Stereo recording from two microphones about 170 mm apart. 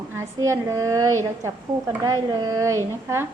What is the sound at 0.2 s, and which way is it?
A woman's voice, 15° right (ahead or behind).